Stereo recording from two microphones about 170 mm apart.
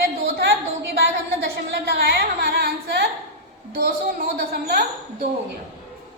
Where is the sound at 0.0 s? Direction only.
75° right (ahead or behind).